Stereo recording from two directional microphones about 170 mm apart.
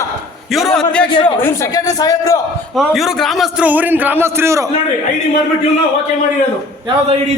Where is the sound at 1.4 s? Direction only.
20° left (ahead or behind).